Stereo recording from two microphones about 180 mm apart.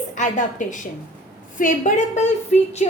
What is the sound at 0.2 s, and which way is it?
A woman's voice, 45° left (ahead or behind).